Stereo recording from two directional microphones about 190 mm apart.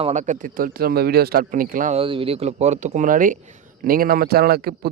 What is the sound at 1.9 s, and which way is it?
A man's voice, 30° right (ahead or behind).